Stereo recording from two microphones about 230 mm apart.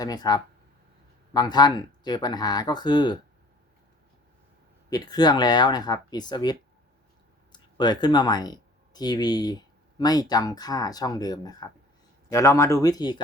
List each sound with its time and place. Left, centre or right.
0.0 s speech: centre
4.9 s speech: centre